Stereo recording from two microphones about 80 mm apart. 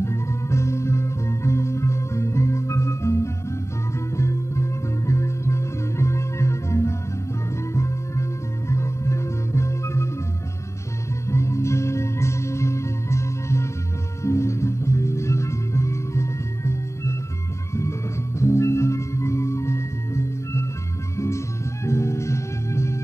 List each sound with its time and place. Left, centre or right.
0.0 s music: left
11.2 s music: left
18.4 s music: left